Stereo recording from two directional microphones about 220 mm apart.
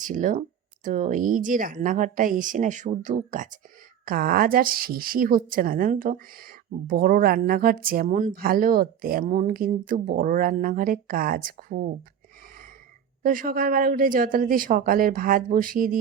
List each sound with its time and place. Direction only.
0.0 s a woman's voice: 35° right (ahead or behind)
13.2 s a woman's voice: 40° right (ahead or behind)